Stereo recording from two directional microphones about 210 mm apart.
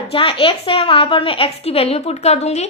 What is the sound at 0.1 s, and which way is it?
A woman's voice, 25° left (ahead or behind).